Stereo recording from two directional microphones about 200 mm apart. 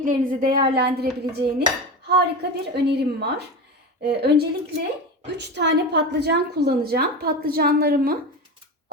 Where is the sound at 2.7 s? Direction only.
55° right (ahead or behind).